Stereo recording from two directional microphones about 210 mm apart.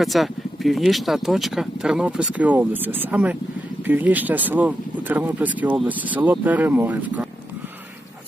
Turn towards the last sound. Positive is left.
turn(degrees=-5)  # may be behind; listen again after turning